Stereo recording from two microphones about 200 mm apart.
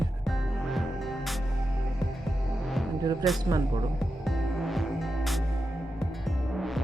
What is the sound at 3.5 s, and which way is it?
Speech, 15° right (ahead or behind).